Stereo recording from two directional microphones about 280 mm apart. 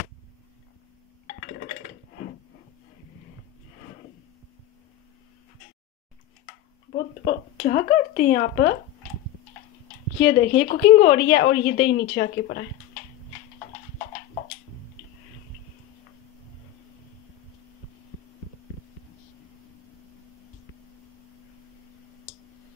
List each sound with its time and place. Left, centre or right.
6.9 s speech: left
10.2 s a woman's voice: left